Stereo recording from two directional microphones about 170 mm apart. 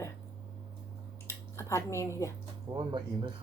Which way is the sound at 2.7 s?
25° right (ahead or behind).